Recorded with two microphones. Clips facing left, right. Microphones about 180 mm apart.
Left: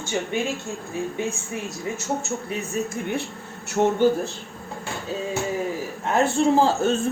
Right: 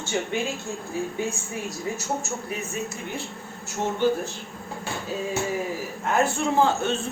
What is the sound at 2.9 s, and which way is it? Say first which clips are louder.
A man's voice: left 6 dB; 60° left (ahead or behind).